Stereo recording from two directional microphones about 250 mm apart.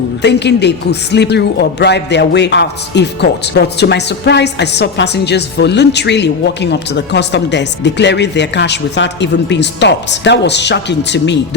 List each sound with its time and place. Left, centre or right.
0.2 s speech: left